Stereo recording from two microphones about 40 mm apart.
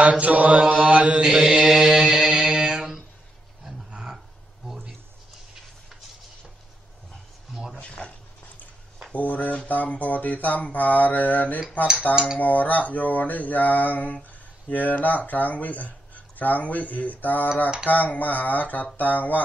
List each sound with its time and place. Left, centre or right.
0.0 s mantra: right
1.2 s mantra: centre
7.5 s a sound: centre
7.8 s a sound: left
9.1 s music: left
9.7 s mantra: left